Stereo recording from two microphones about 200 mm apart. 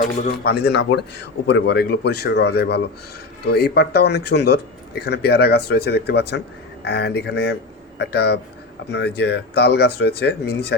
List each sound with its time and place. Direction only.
0.0 s speech: 55° left (ahead or behind)